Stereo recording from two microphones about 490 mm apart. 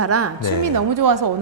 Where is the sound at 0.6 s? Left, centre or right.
Right.